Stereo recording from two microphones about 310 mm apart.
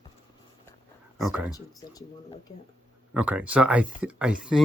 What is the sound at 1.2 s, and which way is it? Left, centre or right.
Speech, centre.